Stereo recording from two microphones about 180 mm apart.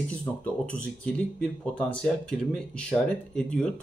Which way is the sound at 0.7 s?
5° left (ahead or behind).